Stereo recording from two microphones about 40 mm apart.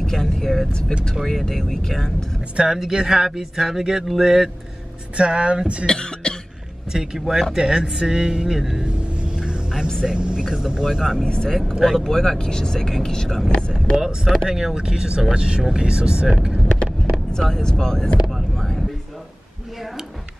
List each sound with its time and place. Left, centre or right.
0.0 s speech: centre
2.5 s speech: centre
3.3 s a sound: centre
5.1 s speech: right
5.9 s cough: left
6.9 s a sound: centre
8.8 s vehicle: right
10.0 s speech: right
10.5 s a sound: centre
11.2 s speech: left
11.8 s speech: centre
13.9 s a sound: centre
15.3 s speech: right
17.4 s speech: centre